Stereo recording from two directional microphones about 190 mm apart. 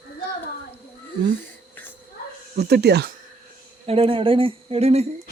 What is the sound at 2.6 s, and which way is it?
Speech, 60° right (ahead or behind).